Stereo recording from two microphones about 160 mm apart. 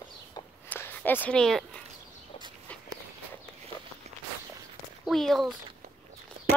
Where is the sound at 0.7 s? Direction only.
10° left (ahead or behind).